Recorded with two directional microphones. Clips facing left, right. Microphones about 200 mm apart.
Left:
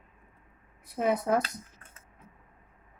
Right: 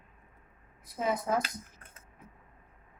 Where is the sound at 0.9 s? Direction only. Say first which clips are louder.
Left 4 dB; 65° left (ahead or behind).